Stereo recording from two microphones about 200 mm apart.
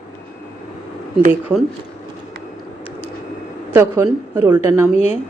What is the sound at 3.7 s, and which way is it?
Speech, 15° right (ahead or behind).